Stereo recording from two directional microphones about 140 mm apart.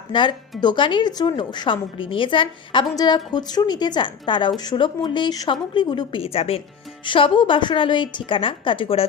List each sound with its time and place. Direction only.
0.1 s a woman's voice: 35° left (ahead or behind)